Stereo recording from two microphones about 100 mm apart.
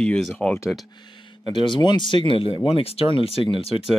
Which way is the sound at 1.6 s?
50° left (ahead or behind).